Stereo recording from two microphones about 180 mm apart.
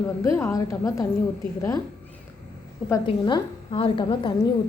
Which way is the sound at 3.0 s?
25° left (ahead or behind).